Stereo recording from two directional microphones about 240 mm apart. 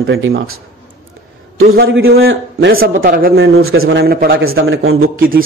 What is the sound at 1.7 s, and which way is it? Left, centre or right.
Speech, right.